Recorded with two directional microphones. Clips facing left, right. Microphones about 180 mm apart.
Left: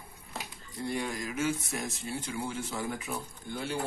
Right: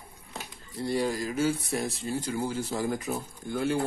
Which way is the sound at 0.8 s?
35° right (ahead or behind).